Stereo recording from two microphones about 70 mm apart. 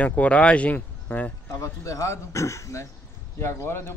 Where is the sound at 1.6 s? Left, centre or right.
Left.